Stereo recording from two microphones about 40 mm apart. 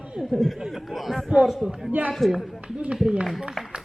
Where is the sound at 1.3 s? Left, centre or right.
Right.